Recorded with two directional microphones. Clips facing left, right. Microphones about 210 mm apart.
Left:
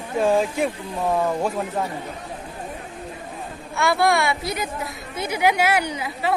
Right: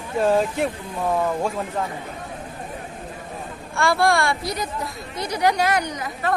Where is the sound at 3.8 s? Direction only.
Centre (ahead or behind).